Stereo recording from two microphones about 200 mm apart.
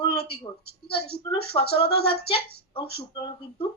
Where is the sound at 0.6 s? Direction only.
50° left (ahead or behind).